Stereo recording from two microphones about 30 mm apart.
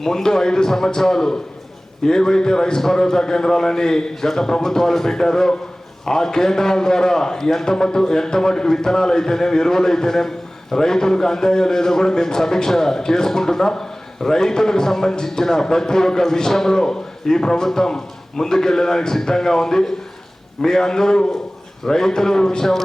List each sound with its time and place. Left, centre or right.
0.0 s a man's voice: centre